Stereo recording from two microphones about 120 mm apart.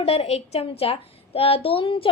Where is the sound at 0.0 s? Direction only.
60° left (ahead or behind).